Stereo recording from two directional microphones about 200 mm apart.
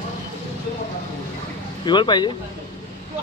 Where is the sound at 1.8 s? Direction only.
25° left (ahead or behind).